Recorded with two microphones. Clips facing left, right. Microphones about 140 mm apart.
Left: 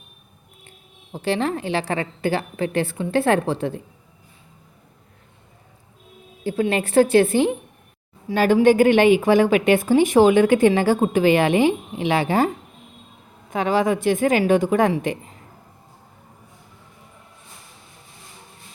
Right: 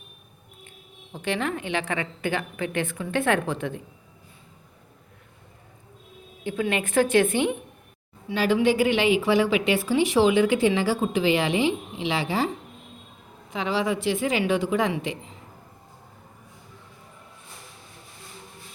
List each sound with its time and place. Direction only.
1.1 s a woman's voice: 35° left (ahead or behind)
6.4 s a woman's voice: 35° left (ahead or behind)
8.3 s a woman's voice: 45° left (ahead or behind)
13.5 s a woman's voice: 50° left (ahead or behind)